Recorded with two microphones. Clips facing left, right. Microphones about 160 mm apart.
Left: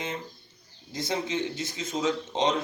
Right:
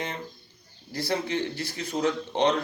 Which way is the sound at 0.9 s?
20° left (ahead or behind).